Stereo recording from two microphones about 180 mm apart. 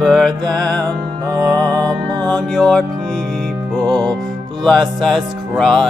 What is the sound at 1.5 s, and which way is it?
Music, 5° left (ahead or behind).